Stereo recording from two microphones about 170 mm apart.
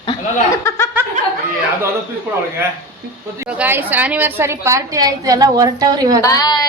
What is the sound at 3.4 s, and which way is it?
A woman's voice, 10° right (ahead or behind).